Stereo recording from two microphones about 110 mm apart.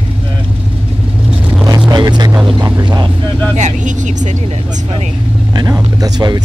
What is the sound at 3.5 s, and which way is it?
Vehicle, 90° right.